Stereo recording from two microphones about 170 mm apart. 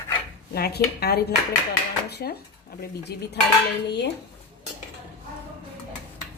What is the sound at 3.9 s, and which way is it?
Speech, 90° left.